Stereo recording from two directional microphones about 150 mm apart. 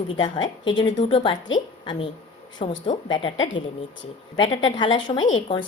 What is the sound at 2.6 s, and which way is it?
Speech, 40° left (ahead or behind).